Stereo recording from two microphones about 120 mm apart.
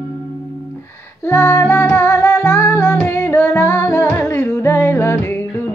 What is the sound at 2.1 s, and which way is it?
Music, 30° left (ahead or behind).